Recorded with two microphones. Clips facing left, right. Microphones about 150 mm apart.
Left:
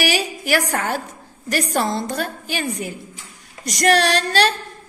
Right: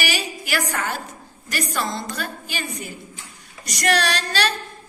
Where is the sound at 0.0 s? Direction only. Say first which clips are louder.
Left 6 dB; 60° left (ahead or behind).